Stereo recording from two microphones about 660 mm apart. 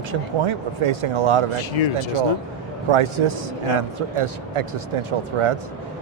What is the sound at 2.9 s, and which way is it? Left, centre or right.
Speech, right.